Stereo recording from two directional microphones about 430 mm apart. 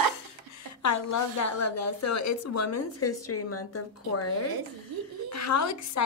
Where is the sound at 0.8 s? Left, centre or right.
Left.